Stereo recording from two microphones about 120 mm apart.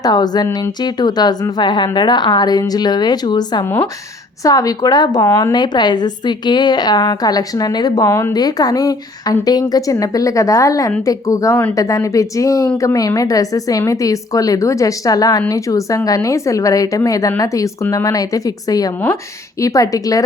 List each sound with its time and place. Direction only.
0.0 s a woman's voice: 35° left (ahead or behind)